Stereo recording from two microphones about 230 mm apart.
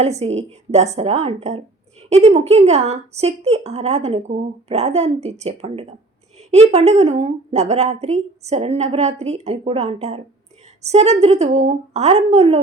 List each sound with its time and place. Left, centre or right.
0.0 s speech: right